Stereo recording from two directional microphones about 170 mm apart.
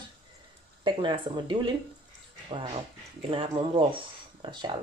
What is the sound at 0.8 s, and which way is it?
Speech, 30° right (ahead or behind).